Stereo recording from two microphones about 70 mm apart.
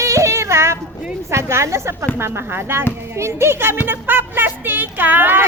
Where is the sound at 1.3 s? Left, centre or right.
Right.